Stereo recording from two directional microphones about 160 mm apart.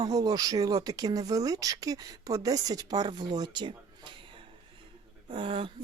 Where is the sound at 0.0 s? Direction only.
25° right (ahead or behind).